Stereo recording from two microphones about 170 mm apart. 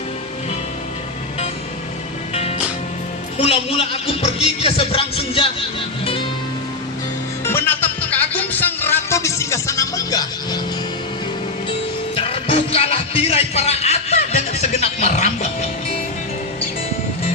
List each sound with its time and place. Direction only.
3.3 s speech: 35° left (ahead or behind)
7.4 s music: 10° left (ahead or behind)
12.1 s music: 30° left (ahead or behind)